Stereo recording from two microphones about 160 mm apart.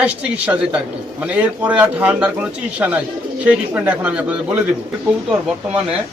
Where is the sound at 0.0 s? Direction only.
5° right (ahead or behind).